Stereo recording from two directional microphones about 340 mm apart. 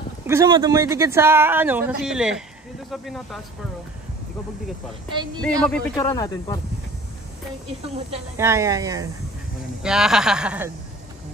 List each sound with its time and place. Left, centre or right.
0.3 s speech: centre
5.4 s speech: centre
8.1 s speech: centre